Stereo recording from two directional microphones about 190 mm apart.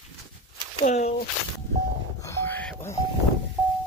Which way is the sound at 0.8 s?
35° left (ahead or behind).